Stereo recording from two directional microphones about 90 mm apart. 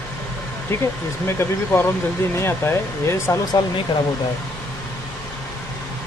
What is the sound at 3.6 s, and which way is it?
Speech, 50° left (ahead or behind).